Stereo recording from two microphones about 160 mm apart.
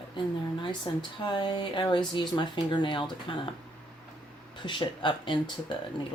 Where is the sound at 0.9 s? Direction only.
30° left (ahead or behind).